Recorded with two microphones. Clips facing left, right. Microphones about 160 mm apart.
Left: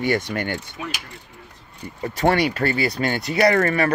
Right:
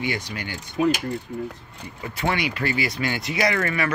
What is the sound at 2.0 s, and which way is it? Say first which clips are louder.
Speech: left 6 dB; 40° left (ahead or behind).